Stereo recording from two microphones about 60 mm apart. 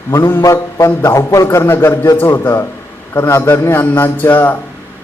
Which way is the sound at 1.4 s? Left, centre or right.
Left.